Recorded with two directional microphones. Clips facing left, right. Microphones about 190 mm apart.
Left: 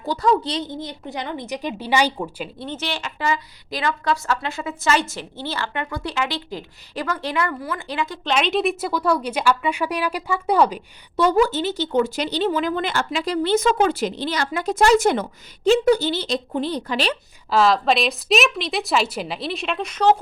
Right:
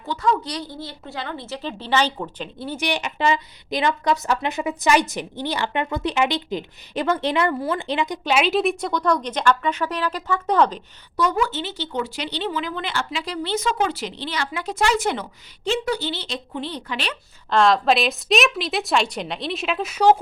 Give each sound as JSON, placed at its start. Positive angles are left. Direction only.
{"t": 0.0, "sound": "a woman's voice", "side_deg": 35}
{"t": 0.5, "sound": "a woman's voice", "side_deg": 20}
{"t": 2.6, "sound": "a woman's voice", "side_deg": -10}
{"t": 11.2, "sound": "a woman's voice", "side_deg": 35}
{"t": 17.5, "sound": "a woman's voice", "side_deg": 5}